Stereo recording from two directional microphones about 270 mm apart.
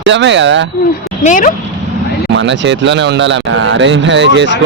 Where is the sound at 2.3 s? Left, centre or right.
Right.